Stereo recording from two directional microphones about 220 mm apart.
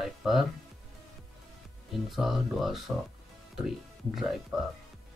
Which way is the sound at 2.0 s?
Centre (ahead or behind).